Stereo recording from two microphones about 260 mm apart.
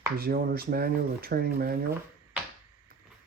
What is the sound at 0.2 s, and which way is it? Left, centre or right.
Speech, right.